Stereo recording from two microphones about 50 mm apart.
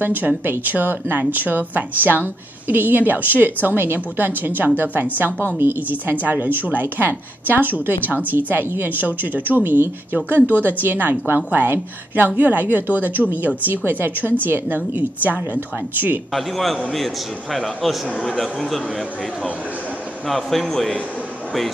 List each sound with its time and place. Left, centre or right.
0.0 s a woman's voice: right
16.3 s a man's voice: centre
20.2 s a man's voice: centre